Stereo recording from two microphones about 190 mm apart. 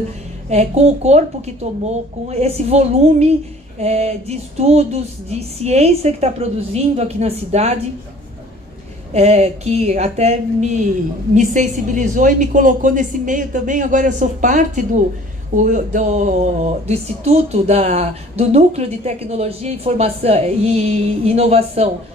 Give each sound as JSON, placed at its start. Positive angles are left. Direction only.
{"t": 0.5, "sound": "speech", "side_deg": -35}
{"t": 9.1, "sound": "speech", "side_deg": -35}